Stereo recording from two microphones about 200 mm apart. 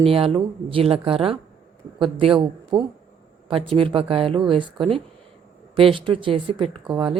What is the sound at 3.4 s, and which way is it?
Speech, 25° right (ahead or behind).